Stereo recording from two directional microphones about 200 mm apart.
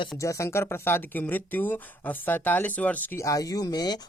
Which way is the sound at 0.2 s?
15° left (ahead or behind).